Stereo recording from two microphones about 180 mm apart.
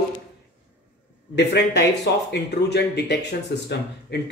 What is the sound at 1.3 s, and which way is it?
Speech, 70° left (ahead or behind).